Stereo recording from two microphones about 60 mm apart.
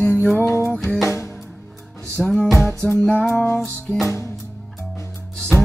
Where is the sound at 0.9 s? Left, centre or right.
Left.